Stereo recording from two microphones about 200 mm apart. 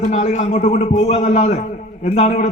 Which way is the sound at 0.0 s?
35° left (ahead or behind).